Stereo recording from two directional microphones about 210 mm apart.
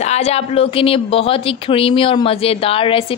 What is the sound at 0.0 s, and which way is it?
A woman's voice, 30° left (ahead or behind).